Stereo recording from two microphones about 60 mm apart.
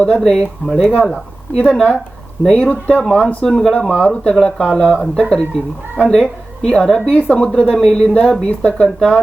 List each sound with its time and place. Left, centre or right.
0.0 s a woman's voice: centre
7.1 s speech: left